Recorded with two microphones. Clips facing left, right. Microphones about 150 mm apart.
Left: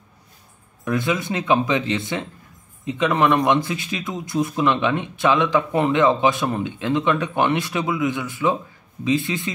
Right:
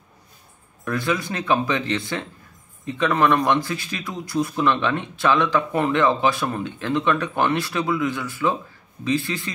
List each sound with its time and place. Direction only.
0.8 s speech: 20° left (ahead or behind)